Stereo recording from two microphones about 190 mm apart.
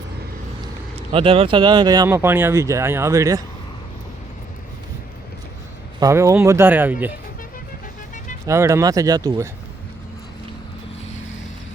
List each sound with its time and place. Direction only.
0.9 s speech: 30° right (ahead or behind)
6.0 s speech: 15° right (ahead or behind)
8.4 s speech: 15° right (ahead or behind)